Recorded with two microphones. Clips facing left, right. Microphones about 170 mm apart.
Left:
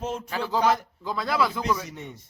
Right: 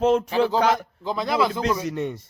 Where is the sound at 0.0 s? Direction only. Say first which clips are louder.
Right 12 dB; 75° right (ahead or behind).